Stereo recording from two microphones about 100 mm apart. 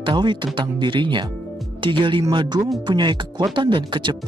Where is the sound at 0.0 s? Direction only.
50° right (ahead or behind).